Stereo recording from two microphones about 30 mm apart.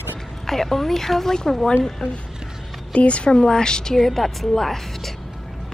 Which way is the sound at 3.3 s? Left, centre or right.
Left.